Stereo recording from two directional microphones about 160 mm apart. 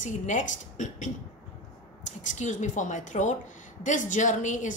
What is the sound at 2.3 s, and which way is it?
A woman's voice, 50° left (ahead or behind).